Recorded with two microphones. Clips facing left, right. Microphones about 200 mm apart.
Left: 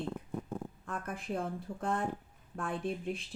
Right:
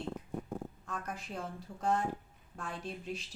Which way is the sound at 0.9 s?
55° left (ahead or behind).